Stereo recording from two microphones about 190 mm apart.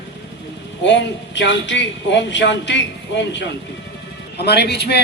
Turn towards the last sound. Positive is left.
turn(degrees=60)  # may be behind; listen again after turning